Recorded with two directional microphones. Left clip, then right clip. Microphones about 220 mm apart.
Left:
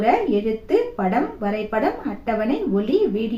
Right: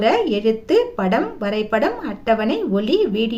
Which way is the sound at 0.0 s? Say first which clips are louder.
Right 2 dB; 55° right (ahead or behind).